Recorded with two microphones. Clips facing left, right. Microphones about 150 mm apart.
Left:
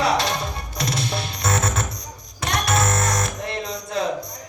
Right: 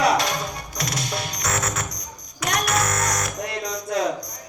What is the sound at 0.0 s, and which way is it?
Music, 30° left (ahead or behind).